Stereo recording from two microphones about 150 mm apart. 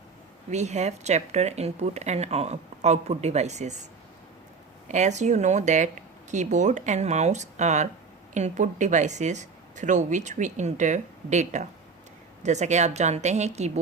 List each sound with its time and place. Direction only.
0.5 s speech: 50° right (ahead or behind)
4.9 s speech: 50° right (ahead or behind)